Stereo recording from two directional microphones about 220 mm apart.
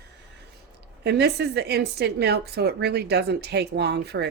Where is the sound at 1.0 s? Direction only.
50° right (ahead or behind).